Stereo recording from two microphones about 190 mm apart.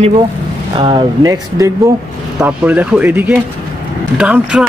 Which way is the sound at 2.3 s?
5° right (ahead or behind).